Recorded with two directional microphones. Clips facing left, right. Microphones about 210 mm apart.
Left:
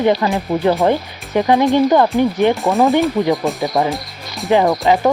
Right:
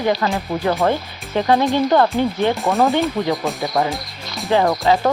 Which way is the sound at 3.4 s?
15° left (ahead or behind).